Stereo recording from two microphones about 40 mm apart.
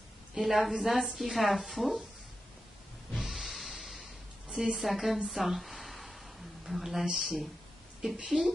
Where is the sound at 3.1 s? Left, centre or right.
Centre.